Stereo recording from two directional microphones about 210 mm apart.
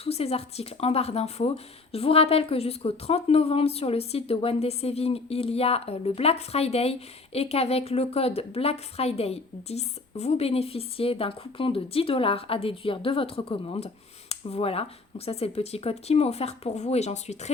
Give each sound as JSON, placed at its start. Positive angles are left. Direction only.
{"t": 0.0, "sound": "a woman's voice", "side_deg": 30}